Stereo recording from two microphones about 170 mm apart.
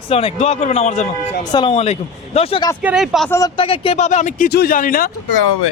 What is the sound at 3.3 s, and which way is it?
A man's voice, 20° left (ahead or behind).